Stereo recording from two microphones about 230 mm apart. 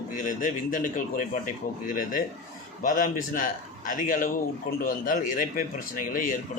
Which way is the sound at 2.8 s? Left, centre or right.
Left.